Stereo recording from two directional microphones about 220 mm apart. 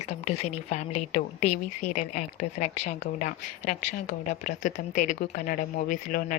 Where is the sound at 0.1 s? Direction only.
30° left (ahead or behind).